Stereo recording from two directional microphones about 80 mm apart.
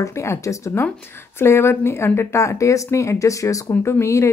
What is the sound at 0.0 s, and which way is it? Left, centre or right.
Speech, left.